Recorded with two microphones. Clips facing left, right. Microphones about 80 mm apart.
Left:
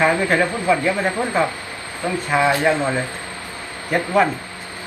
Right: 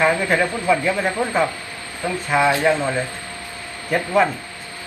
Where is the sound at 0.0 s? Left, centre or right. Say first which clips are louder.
Left 1 dB; centre.